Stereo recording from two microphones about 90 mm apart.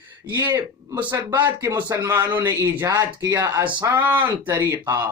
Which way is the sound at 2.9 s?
50° right (ahead or behind).